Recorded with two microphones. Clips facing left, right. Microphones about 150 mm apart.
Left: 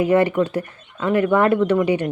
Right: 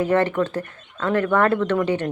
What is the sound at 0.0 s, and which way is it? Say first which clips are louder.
Speech: left 3 dB; 10° left (ahead or behind).